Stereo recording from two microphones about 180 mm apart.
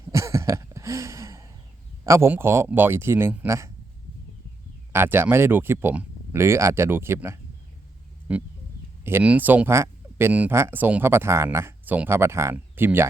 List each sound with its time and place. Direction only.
0.1 s a sound: 15° right (ahead or behind)
2.0 s speech: 15° right (ahead or behind)
4.9 s speech: 15° right (ahead or behind)